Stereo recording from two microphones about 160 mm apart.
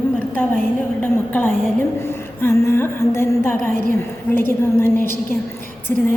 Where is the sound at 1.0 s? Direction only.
10° left (ahead or behind).